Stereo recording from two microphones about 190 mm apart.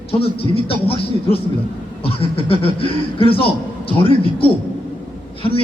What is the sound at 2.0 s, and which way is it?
A man's voice, 30° left (ahead or behind).